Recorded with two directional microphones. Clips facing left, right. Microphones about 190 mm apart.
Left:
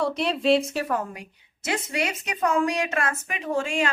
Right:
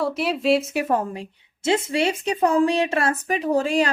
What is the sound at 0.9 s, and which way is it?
A woman's voice, 30° right (ahead or behind).